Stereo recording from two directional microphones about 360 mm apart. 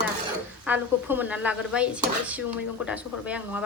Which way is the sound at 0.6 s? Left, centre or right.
Centre.